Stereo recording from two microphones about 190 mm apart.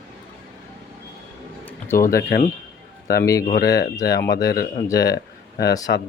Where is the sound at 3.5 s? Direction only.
60° left (ahead or behind).